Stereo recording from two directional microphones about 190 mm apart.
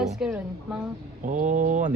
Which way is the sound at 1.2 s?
40° right (ahead or behind).